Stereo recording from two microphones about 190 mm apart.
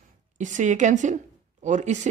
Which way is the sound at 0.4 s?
40° right (ahead or behind).